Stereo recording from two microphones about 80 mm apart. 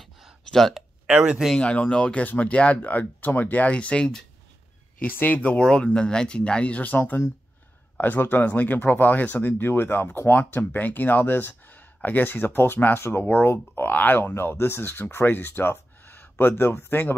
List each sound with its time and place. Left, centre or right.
0.0 s a sound: centre
1.0 s speech: centre
1.6 s speech: centre
5.0 s speech: left